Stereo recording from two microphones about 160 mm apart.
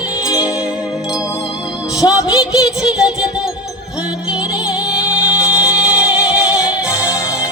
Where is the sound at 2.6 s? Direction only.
5° right (ahead or behind).